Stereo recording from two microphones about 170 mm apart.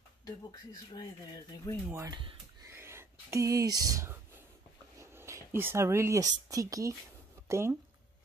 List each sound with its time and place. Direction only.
0.2 s speech: 25° left (ahead or behind)
1.9 s speech: 15° right (ahead or behind)
2.7 s a sound: 15° right (ahead or behind)
4.9 s speech: 15° right (ahead or behind)